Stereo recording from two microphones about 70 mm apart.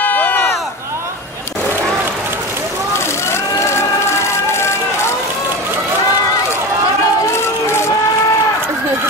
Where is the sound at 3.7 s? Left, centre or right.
Left.